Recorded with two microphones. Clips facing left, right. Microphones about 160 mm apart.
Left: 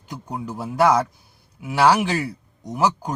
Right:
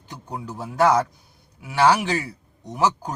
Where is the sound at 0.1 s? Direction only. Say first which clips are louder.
Left 3 dB; 10° left (ahead or behind).